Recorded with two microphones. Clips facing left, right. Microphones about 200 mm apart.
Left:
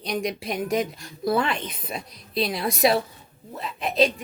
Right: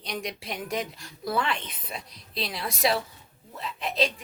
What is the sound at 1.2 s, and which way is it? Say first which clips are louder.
Speech: left 5 dB; 45° left (ahead or behind).